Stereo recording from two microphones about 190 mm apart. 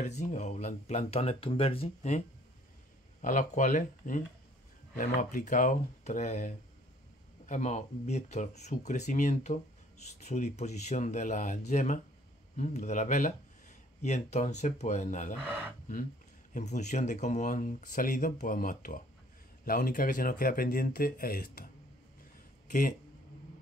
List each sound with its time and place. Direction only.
0.0 s speech: 40° left (ahead or behind)
16.5 s speech: 40° left (ahead or behind)
22.7 s speech: 45° left (ahead or behind)